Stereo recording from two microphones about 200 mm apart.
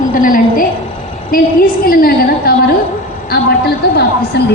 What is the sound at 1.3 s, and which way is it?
A woman's voice, 45° left (ahead or behind).